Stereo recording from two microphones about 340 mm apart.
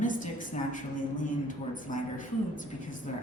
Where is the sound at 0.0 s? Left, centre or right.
Left.